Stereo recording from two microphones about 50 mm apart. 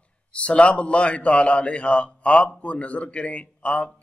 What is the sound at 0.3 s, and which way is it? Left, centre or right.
A man's voice, left.